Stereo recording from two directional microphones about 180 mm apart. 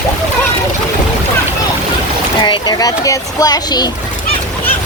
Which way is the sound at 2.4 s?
25° left (ahead or behind).